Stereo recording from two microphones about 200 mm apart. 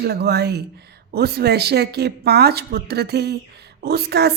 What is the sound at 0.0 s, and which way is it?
A woman's voice, 55° right (ahead or behind).